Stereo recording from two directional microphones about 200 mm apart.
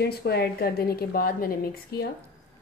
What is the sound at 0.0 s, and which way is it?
A woman's voice, 55° left (ahead or behind).